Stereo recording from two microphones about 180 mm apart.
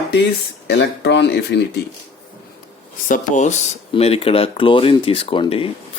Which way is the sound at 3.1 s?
40° left (ahead or behind).